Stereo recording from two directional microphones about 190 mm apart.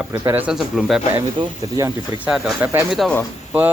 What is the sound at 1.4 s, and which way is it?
Speech, 20° right (ahead or behind).